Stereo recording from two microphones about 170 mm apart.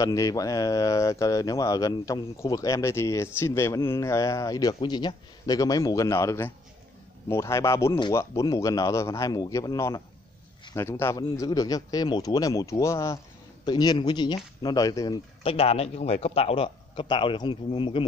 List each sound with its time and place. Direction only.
0.0 s a man's voice: 20° left (ahead or behind)
15.4 s a man's voice: 35° left (ahead or behind)